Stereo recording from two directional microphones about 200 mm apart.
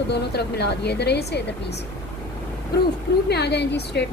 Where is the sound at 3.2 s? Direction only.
55° left (ahead or behind).